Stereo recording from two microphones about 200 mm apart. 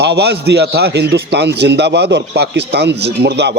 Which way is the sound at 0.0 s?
55° right (ahead or behind).